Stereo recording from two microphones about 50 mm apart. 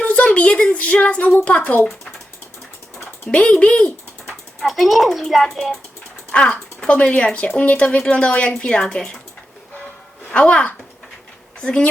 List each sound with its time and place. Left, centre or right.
0.0 s a woman's voice: left
3.2 s speech: left
4.6 s a child's voice: centre
6.3 s speech: left
8.5 s speech: centre
10.3 s speech: left